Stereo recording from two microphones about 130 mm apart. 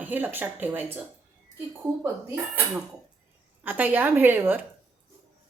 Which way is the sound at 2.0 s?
10° right (ahead or behind).